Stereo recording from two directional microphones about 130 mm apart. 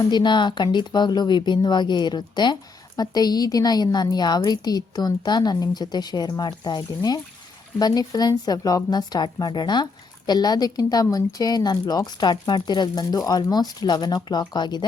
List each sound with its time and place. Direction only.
0.0 s speech: 35° left (ahead or behind)